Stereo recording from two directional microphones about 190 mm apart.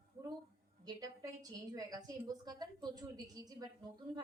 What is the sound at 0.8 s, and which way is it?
A woman's voice, 20° right (ahead or behind).